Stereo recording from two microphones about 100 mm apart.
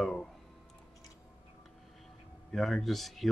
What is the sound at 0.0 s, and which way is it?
Music, 5° left (ahead or behind).